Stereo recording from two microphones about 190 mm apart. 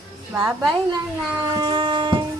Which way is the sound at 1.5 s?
25° right (ahead or behind).